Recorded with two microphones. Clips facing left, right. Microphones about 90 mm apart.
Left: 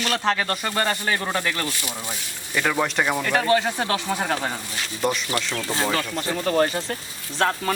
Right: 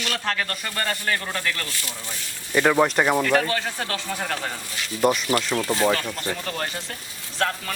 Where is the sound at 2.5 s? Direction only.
15° right (ahead or behind).